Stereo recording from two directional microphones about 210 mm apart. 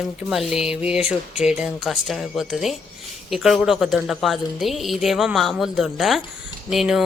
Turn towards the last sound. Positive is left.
turn(degrees=0)  # may be behind; listen again after turning